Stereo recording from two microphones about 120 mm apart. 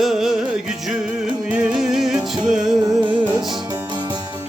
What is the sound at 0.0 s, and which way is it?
Music, 5° right (ahead or behind).